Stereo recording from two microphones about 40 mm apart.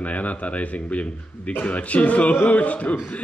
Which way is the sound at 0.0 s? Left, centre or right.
Left.